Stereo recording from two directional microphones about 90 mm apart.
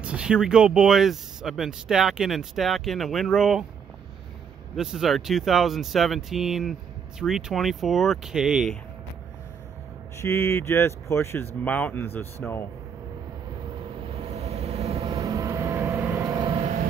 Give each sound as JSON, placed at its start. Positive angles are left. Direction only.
{"t": 0.0, "sound": "speech", "side_deg": -10}
{"t": 4.7, "sound": "speech", "side_deg": -5}
{"t": 10.2, "sound": "speech", "side_deg": 30}
{"t": 15.0, "sound": "vehicle", "side_deg": -45}
{"t": 16.3, "sound": "vehicle", "side_deg": -65}